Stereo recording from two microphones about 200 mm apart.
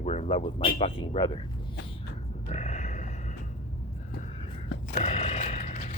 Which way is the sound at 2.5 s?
35° left (ahead or behind).